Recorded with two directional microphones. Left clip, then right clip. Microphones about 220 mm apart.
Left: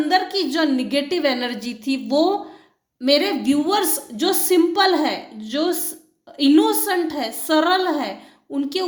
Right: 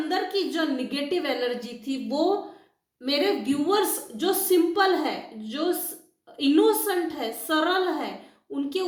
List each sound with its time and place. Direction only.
0.1 s a woman's voice: 50° left (ahead or behind)